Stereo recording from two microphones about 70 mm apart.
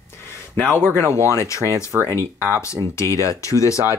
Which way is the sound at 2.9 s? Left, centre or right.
Left.